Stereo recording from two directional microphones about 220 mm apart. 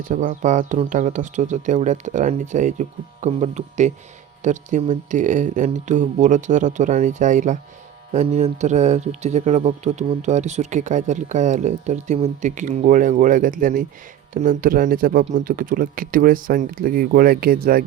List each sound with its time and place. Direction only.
0.1 s speech: 35° right (ahead or behind)